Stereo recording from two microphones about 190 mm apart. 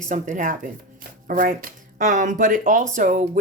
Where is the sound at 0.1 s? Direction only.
40° right (ahead or behind).